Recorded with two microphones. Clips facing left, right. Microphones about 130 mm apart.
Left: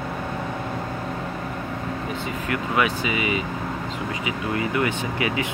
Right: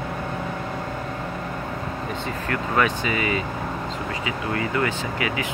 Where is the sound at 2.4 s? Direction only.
10° left (ahead or behind).